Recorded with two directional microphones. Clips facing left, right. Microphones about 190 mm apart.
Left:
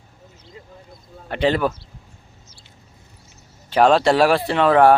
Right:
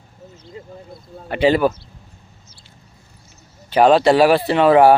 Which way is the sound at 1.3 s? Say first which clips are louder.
Right 4 dB; 5° right (ahead or behind).